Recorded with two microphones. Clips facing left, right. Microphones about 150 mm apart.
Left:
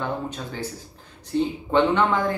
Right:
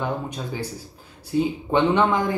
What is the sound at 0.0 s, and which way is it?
Speech, 10° right (ahead or behind).